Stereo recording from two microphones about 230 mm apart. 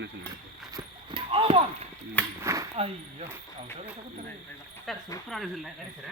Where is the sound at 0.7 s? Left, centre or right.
Right.